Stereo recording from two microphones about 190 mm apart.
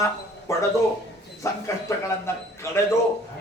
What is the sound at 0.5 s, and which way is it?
A man's voice, 15° left (ahead or behind).